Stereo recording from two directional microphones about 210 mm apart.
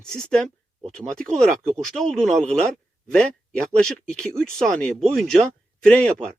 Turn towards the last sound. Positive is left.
turn(degrees=5)  # may be behind; listen again after turning